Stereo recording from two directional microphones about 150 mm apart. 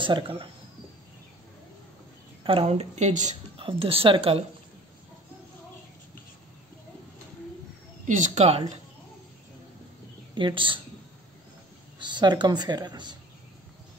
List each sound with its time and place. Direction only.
0.0 s a woman's voice: 35° right (ahead or behind)
2.4 s a woman's voice: 40° right (ahead or behind); by 3.3 s 55° right (ahead or behind)
3.5 s a woman's voice: 35° right (ahead or behind)
8.1 s a woman's voice: 50° right (ahead or behind)
10.3 s a woman's voice: 35° right (ahead or behind)
12.0 s a woman's voice: 30° right (ahead or behind)